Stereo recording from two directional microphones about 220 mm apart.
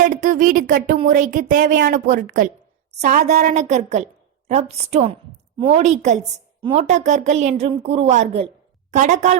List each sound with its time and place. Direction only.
0.0 s a woman's voice: 35° right (ahead or behind)